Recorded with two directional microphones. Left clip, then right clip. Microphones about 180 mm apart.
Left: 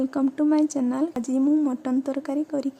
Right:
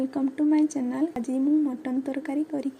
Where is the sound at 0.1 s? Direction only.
30° left (ahead or behind).